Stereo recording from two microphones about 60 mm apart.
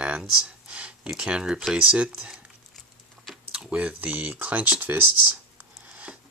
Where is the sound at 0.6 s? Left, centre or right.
Centre.